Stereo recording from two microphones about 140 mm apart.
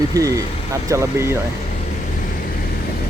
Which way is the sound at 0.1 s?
25° right (ahead or behind).